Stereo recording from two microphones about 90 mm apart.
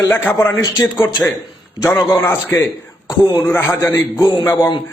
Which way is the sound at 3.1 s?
45° left (ahead or behind).